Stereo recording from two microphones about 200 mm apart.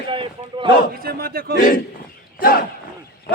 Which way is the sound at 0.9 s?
50° right (ahead or behind).